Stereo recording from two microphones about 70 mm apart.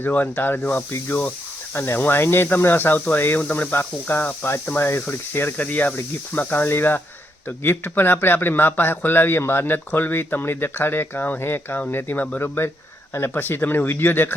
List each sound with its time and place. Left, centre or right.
0.0 s speech: left
12.4 s speech: left